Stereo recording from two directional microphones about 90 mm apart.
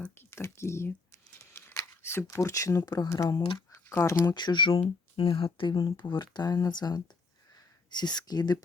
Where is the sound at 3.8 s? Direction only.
30° left (ahead or behind).